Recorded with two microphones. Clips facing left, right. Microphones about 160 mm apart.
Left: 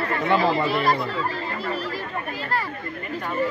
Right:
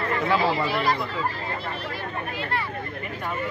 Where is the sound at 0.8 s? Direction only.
40° left (ahead or behind).